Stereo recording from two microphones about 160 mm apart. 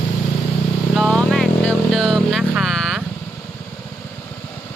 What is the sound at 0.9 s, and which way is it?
Vehicle, 5° left (ahead or behind).